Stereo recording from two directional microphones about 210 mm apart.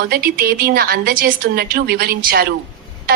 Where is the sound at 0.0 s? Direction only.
45° right (ahead or behind).